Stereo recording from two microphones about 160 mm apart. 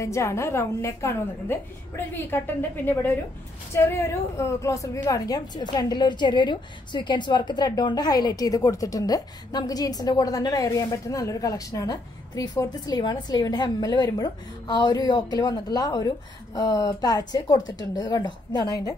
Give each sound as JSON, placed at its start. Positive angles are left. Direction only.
{"t": 0.0, "sound": "a woman's voice", "side_deg": 15}